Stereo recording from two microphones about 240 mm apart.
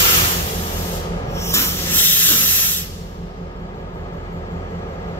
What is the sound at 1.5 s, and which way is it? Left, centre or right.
Hiss, centre.